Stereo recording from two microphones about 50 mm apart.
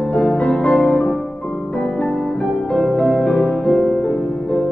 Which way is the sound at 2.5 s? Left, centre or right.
Centre.